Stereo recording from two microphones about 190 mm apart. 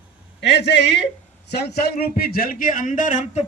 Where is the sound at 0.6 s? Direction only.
65° left (ahead or behind).